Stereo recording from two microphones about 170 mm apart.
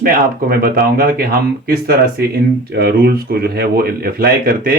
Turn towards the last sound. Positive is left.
turn(degrees=-60)  # may be behind; listen again after turning